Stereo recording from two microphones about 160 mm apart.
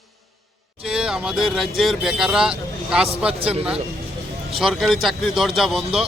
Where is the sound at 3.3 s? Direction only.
35° right (ahead or behind).